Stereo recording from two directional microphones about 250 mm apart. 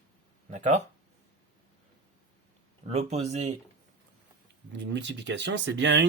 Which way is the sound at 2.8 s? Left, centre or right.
Right.